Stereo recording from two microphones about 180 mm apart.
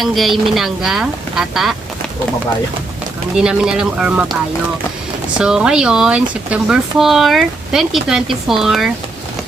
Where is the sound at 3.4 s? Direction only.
5° right (ahead or behind).